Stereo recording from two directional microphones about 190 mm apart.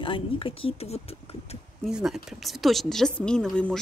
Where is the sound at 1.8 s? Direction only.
5° right (ahead or behind).